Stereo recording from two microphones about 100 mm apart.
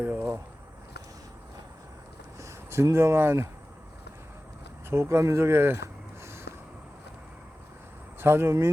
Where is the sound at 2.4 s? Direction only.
30° right (ahead or behind).